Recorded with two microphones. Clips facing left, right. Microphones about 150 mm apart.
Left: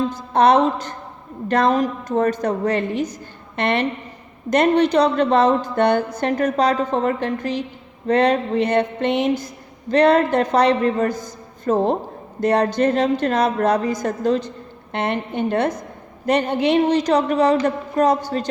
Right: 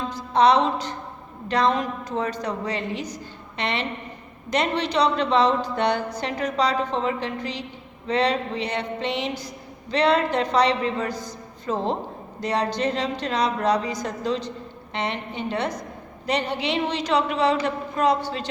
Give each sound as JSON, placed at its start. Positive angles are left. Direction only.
{"t": 0.1, "sound": "a woman's voice", "side_deg": 50}